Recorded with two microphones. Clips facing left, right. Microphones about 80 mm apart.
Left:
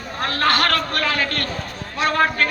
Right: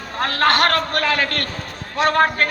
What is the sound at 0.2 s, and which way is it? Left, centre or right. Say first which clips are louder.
Speech: right 3 dB; right.